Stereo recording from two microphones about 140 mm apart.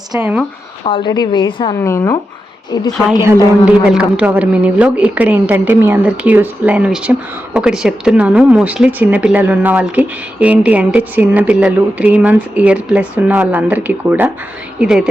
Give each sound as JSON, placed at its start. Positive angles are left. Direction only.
{"t": 0.2, "sound": "a woman's voice", "side_deg": -10}
{"t": 0.9, "sound": "a woman's voice", "side_deg": 35}
{"t": 1.8, "sound": "a woman's voice", "side_deg": 20}
{"t": 3.7, "sound": "a woman's voice", "side_deg": -5}